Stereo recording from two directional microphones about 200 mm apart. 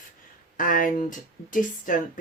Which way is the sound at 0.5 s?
40° left (ahead or behind).